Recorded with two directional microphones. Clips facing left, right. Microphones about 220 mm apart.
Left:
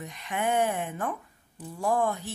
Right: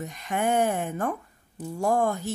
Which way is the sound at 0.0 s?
45° right (ahead or behind).